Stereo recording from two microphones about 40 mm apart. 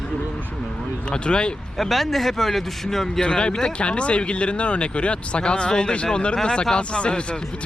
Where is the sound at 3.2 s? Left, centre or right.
Left.